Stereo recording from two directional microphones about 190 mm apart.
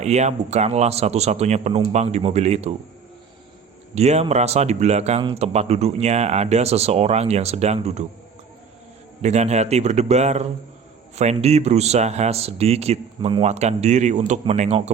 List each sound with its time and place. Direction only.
0.0 s speech: 35° right (ahead or behind)
3.9 s speech: 35° right (ahead or behind)
9.2 s speech: 35° right (ahead or behind)